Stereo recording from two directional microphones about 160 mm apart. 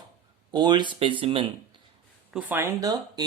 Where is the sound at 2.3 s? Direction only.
15° right (ahead or behind).